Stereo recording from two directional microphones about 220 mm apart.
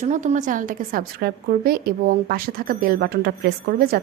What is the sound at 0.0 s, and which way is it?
A woman's voice, 35° right (ahead or behind).